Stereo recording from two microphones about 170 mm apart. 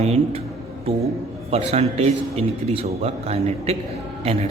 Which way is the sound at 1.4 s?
40° right (ahead or behind).